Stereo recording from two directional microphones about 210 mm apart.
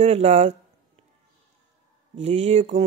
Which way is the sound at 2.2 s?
30° right (ahead or behind).